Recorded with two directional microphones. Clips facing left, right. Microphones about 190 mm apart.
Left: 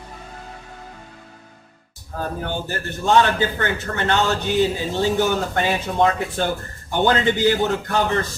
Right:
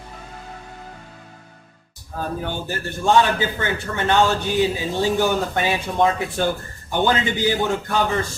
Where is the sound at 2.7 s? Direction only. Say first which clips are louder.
Even; 15° right (ahead or behind).